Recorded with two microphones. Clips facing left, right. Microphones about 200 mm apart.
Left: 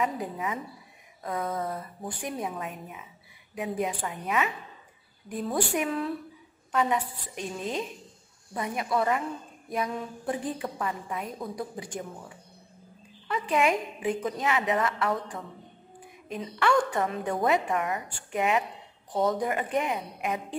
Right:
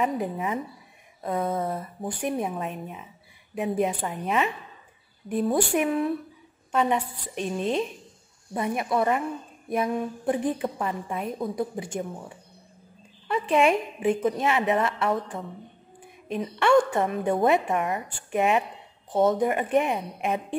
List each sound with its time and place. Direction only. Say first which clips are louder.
0.0 s a woman's voice: right 4 dB; 25° right (ahead or behind)
13.3 s a woman's voice: right 4 dB; 25° right (ahead or behind)